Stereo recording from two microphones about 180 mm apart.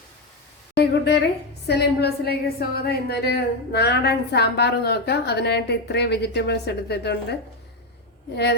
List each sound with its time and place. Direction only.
0.8 s a woman's voice: 70° left (ahead or behind)